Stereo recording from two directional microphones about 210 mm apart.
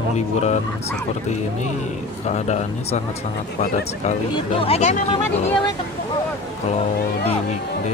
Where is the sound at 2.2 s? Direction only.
30° left (ahead or behind).